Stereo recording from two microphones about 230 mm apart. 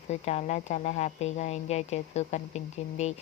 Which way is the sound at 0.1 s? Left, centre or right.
Left.